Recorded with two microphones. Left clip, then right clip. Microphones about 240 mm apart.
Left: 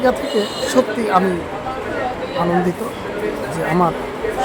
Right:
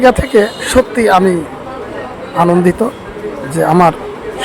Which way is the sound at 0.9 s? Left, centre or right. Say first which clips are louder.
Right 7 dB; right.